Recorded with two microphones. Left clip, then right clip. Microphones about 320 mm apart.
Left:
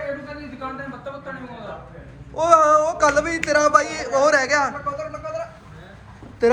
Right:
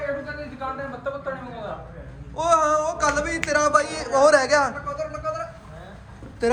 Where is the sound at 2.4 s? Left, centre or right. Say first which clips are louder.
Left 5 dB; centre.